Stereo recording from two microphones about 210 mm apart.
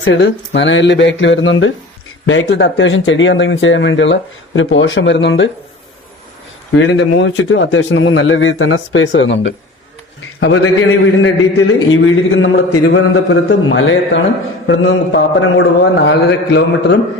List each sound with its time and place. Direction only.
0.0 s speech: 60° left (ahead or behind)
6.7 s a man's voice: 60° left (ahead or behind)